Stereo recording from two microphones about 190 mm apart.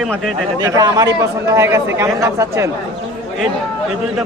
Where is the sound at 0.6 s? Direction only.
20° right (ahead or behind).